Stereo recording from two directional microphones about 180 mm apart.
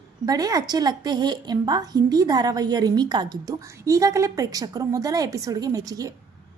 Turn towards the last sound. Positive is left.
turn(degrees=-20)  # may be behind; listen again after turning